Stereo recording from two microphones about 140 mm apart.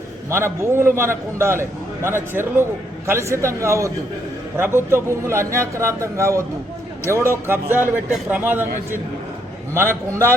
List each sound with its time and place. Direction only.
0.3 s a man's voice: 20° right (ahead or behind)
9.7 s a man's voice: 20° right (ahead or behind)